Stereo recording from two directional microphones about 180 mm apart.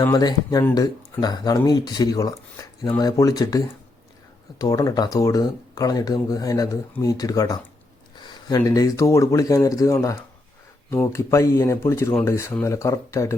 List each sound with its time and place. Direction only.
0.0 s speech: 20° left (ahead or behind)